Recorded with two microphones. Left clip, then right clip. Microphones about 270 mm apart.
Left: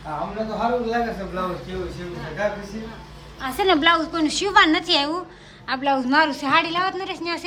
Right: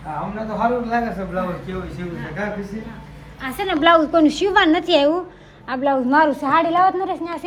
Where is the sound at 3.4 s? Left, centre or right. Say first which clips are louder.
Left 4 dB; left.